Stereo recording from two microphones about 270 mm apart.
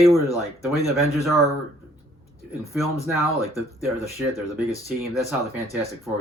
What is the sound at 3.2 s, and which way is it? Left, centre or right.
Speech, centre.